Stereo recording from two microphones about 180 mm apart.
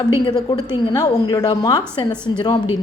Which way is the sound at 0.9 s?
20° left (ahead or behind).